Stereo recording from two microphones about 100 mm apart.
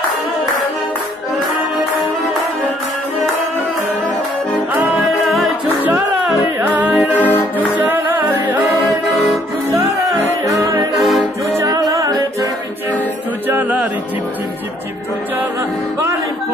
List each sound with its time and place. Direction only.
5.2 s music: centre (ahead or behind)
6.6 s music: 15° right (ahead or behind)
7.2 s music: 15° left (ahead or behind)
7.5 s music: 20° right (ahead or behind)
10.4 s music: 25° right (ahead or behind)
11.0 s music: centre (ahead or behind)
11.7 s music: 35° right (ahead or behind)
13.5 s music: 15° right (ahead or behind)